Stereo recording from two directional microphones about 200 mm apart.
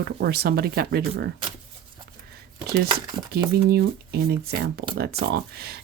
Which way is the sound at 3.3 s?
50° right (ahead or behind).